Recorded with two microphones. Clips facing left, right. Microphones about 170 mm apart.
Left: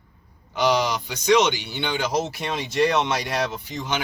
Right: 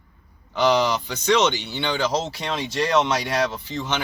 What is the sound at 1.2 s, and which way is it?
Speech, 15° left (ahead or behind).